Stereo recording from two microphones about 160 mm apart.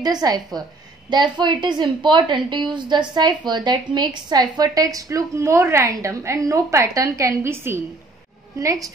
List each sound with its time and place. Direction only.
0.0 s a woman's voice: 25° right (ahead or behind)